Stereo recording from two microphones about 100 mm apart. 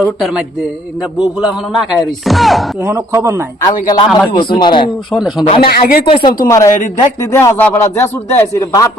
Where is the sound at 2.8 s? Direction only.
30° right (ahead or behind).